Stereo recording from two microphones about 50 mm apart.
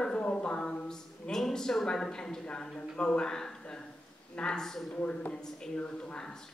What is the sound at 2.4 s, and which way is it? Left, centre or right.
Speech, centre.